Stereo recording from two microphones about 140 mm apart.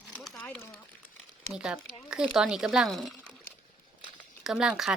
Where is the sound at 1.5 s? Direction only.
5° right (ahead or behind).